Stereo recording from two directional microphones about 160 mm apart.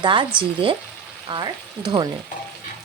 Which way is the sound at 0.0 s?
30° right (ahead or behind).